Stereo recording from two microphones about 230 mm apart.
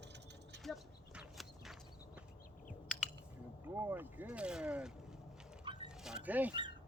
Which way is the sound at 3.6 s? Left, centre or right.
Centre.